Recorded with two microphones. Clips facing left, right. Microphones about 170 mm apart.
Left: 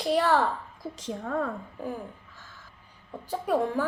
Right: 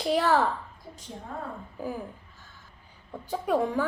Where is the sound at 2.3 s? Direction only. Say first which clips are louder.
Left 3 dB; 90° left.